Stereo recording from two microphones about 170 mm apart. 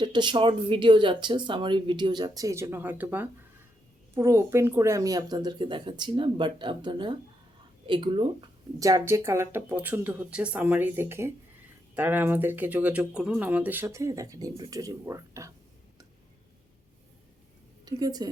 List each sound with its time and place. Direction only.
0.0 s speech: 25° right (ahead or behind)
17.8 s a woman's voice: 25° right (ahead or behind)